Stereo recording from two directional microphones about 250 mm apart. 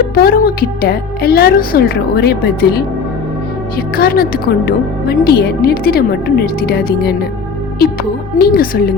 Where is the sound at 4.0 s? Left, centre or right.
Left.